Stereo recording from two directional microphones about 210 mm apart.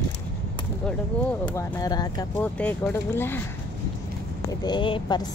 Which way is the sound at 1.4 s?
15° left (ahead or behind).